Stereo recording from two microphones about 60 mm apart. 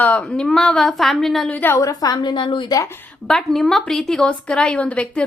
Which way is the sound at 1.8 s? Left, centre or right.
Left.